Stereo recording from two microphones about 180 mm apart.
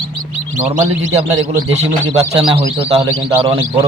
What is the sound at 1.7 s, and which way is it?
Speech, 35° right (ahead or behind).